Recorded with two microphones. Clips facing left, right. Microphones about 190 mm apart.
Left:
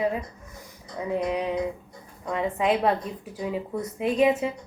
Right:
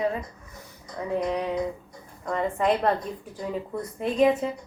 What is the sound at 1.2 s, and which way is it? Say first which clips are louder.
A woman's voice: even; 15° left (ahead or behind).